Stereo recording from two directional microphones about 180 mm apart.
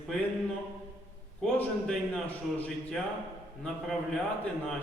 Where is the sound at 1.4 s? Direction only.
5° left (ahead or behind).